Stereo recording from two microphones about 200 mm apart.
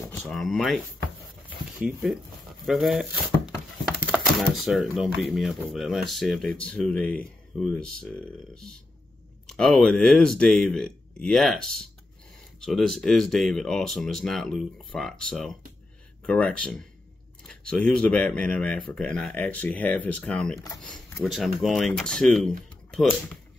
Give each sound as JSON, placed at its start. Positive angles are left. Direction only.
{"t": 0.1, "sound": "speech", "side_deg": 0}
{"t": 1.8, "sound": "speech", "side_deg": 0}
{"t": 4.0, "sound": "typewriter", "side_deg": -5}
{"t": 4.6, "sound": "speech", "side_deg": 0}
{"t": 9.5, "sound": "speech", "side_deg": 5}
{"t": 22.8, "sound": "typing", "side_deg": 5}